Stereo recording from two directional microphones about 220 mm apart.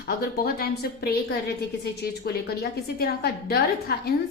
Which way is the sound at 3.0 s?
45° left (ahead or behind).